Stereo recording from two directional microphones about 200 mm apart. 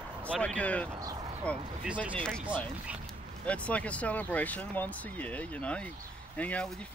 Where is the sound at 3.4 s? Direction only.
5° left (ahead or behind).